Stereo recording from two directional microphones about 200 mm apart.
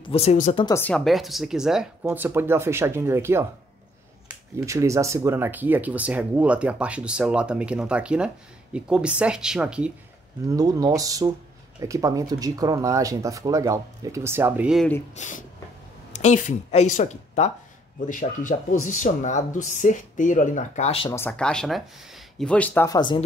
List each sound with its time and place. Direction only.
0.0 s speech: 30° left (ahead or behind)
0.7 s speech: 10° left (ahead or behind); by 3.4 s 10° right (ahead or behind)
4.6 s speech: 15° right (ahead or behind)
10.4 s speech: 15° right (ahead or behind)
15.1 s speech: 40° left (ahead or behind)
21.1 s speech: 10° left (ahead or behind)
22.8 s speech: 20° left (ahead or behind)